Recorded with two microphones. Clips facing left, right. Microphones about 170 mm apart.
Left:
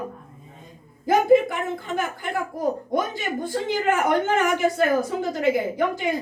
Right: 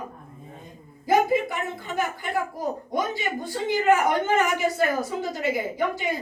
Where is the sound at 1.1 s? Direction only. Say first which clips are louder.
Left 4 dB; 50° left (ahead or behind).